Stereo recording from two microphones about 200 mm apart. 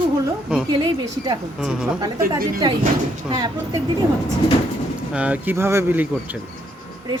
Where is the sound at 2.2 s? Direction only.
45° right (ahead or behind).